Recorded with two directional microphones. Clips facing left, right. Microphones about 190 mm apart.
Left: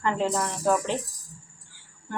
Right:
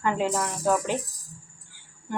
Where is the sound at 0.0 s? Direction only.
10° right (ahead or behind).